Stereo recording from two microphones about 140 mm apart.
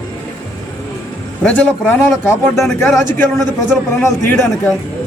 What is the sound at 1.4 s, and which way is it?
A man's voice, 10° left (ahead or behind).